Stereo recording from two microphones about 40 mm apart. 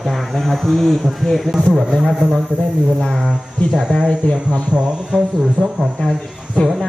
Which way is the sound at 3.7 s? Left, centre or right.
Right.